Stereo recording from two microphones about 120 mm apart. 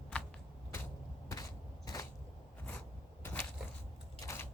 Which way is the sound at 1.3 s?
30° left (ahead or behind).